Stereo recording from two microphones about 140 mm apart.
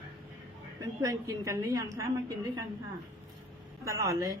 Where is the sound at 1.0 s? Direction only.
25° right (ahead or behind).